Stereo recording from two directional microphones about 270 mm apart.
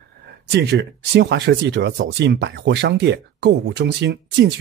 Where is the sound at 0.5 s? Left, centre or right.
Right.